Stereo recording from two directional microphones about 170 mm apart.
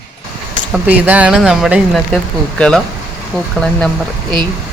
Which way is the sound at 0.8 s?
10° right (ahead or behind).